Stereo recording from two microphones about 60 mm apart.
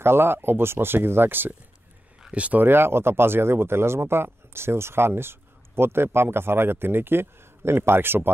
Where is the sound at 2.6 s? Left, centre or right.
Right.